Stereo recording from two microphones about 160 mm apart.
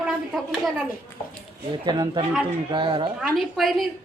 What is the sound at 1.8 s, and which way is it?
Speech, 25° right (ahead or behind).